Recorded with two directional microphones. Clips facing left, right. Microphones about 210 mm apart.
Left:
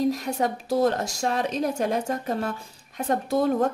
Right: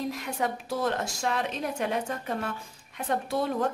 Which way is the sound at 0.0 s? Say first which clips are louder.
Left 6 dB; 40° left (ahead or behind).